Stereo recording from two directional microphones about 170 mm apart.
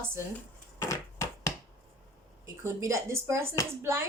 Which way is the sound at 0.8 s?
15° left (ahead or behind).